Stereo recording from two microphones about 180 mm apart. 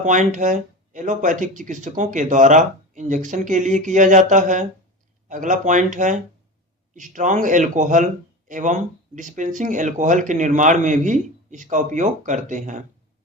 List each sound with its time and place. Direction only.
0.0 s speech: 45° right (ahead or behind)